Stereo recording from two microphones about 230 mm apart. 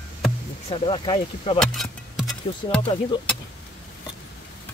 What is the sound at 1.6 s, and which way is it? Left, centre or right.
Speech, centre.